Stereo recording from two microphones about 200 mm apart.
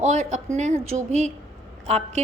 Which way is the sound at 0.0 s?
35° right (ahead or behind).